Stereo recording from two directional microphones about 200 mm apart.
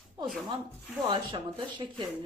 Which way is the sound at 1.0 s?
25° right (ahead or behind).